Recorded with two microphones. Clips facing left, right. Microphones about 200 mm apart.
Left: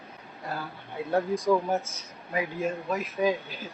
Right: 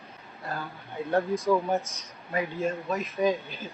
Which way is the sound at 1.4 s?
10° left (ahead or behind).